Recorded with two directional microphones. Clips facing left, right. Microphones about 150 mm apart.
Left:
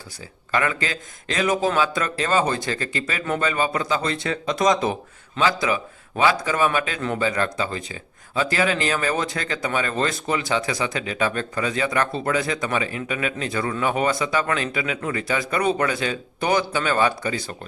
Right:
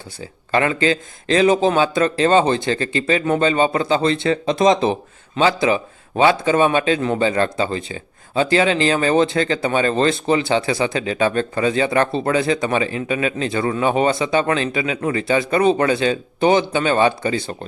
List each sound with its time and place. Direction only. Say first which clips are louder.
0.5 s a man's voice: right 7 dB; 25° right (ahead or behind)